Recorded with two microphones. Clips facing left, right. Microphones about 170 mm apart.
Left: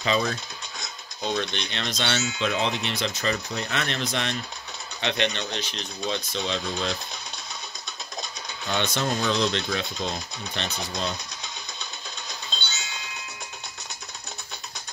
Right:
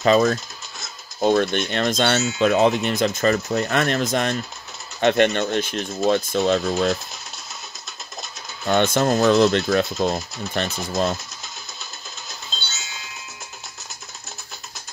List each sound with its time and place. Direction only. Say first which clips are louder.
0.0 s speech: right 9 dB; 45° right (ahead or behind)
8.6 s speech: right 8 dB; 50° right (ahead or behind)
12.3 s music: even; centre (ahead or behind)